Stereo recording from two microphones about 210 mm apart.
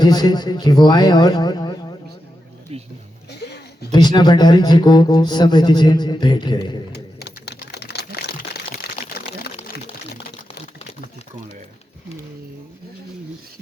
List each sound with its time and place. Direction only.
0.0 s a man's voice: 20° left (ahead or behind)
3.4 s a sound: 50° left (ahead or behind)
3.9 s speech: 20° left (ahead or behind)
6.9 s typing: 50° left (ahead or behind)